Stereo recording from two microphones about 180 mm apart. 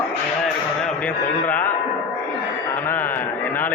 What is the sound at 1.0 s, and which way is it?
Speech, 10° left (ahead or behind).